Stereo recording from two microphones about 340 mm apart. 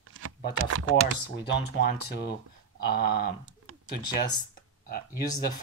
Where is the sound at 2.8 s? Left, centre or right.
Left.